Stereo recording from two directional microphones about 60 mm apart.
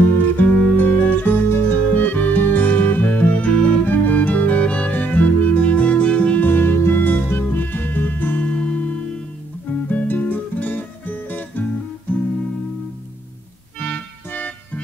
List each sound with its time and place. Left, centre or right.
0.4 s music: left
6.5 s music: left
13.7 s music: left